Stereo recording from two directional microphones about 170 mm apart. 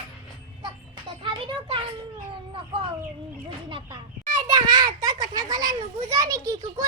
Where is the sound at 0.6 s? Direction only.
30° right (ahead or behind).